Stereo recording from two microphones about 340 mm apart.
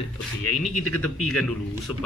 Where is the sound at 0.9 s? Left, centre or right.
Centre.